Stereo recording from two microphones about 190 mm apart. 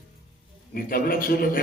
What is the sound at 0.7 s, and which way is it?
Speech, 50° left (ahead or behind).